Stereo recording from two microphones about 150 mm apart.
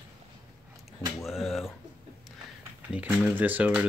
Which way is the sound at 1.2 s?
Centre (ahead or behind).